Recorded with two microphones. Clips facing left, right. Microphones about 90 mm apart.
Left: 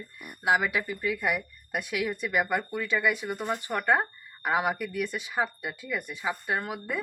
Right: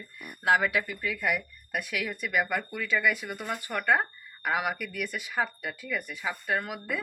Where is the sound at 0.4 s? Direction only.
20° left (ahead or behind).